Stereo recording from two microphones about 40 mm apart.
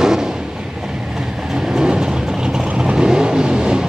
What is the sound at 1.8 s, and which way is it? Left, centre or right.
Train, centre.